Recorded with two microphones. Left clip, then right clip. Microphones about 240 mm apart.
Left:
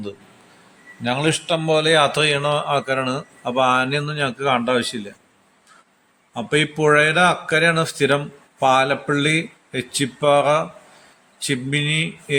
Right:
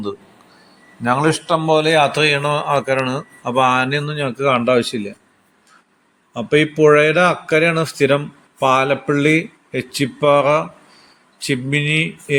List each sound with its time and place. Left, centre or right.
1.0 s speech: centre
6.3 s speech: centre